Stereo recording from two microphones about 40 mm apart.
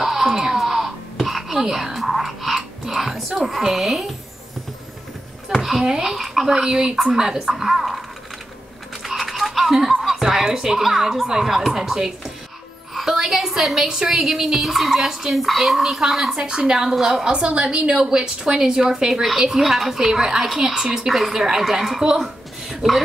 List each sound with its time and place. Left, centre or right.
0.0 s a sound: centre
3.4 s a woman's voice: centre
5.6 s a woman's voice: centre
9.0 s a sound: centre
9.9 s chuckle: centre
10.2 s a woman's voice: centre
13.1 s a sound: centre
13.8 s a woman's voice: centre
16.3 s a woman's voice: right
16.9 s a woman's voice: centre
17.2 s a woman's voice: centre